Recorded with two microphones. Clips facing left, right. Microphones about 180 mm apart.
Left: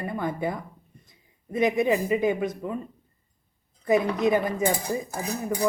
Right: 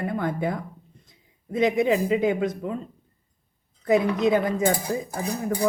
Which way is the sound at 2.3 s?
20° left (ahead or behind).